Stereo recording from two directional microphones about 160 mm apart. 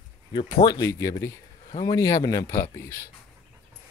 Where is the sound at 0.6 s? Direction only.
20° left (ahead or behind).